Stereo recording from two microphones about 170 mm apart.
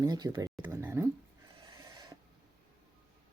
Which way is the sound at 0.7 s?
15° right (ahead or behind).